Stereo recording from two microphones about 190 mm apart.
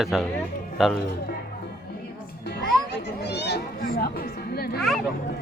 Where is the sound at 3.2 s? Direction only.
60° left (ahead or behind).